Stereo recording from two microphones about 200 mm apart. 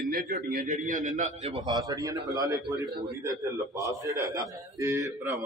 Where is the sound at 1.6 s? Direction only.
20° right (ahead or behind).